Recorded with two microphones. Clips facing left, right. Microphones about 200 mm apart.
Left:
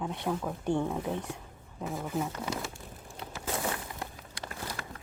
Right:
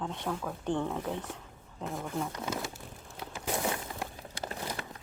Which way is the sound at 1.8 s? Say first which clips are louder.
Left 2 dB; centre (ahead or behind).